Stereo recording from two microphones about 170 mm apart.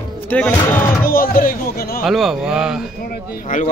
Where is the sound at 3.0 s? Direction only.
55° left (ahead or behind).